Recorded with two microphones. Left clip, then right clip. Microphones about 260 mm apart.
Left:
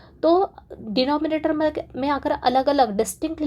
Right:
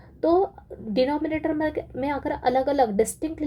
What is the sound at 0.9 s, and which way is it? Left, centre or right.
Speech, centre.